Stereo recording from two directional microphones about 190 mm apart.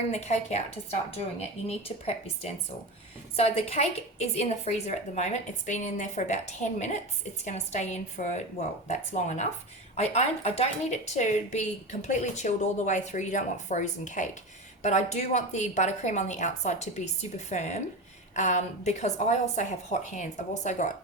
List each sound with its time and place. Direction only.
0.1 s speech: 35° left (ahead or behind)